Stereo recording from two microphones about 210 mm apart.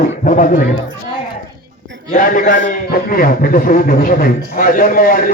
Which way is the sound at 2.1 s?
40° left (ahead or behind).